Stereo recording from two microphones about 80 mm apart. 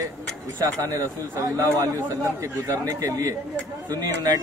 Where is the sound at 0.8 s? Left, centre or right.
Right.